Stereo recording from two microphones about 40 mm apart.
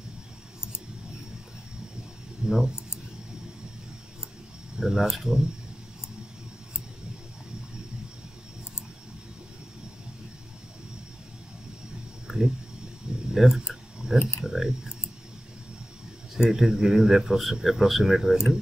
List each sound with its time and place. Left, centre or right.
2.4 s speech: centre
4.7 s speech: centre
12.3 s a sound: centre
14.4 s speech: centre
16.3 s speech: centre